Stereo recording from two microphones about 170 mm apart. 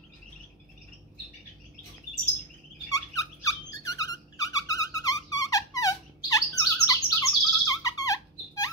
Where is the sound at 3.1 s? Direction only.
20° left (ahead or behind).